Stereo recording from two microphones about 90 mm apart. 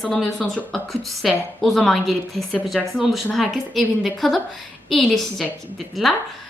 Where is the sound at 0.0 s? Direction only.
Centre (ahead or behind).